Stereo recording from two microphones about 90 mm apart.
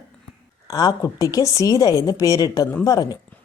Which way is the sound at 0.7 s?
45° left (ahead or behind).